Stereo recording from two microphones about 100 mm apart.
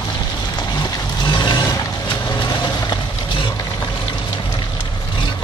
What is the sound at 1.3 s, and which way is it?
Vehicle, 40° left (ahead or behind).